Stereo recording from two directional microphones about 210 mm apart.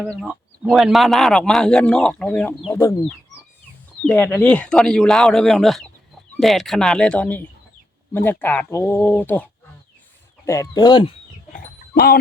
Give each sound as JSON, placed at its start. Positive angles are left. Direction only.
{"t": 0.0, "sound": "a man's voice", "side_deg": 0}
{"t": 4.0, "sound": "a man's voice", "side_deg": 5}